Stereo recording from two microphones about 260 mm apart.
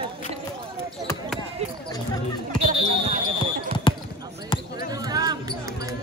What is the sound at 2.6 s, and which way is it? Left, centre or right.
Basketball bounce, right.